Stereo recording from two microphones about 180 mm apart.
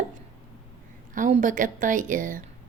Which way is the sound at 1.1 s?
45° right (ahead or behind).